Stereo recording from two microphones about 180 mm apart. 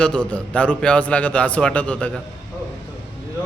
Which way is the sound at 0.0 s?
5° left (ahead or behind).